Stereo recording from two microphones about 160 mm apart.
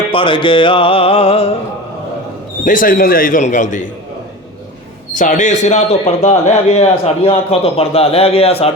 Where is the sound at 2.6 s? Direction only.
60° left (ahead or behind).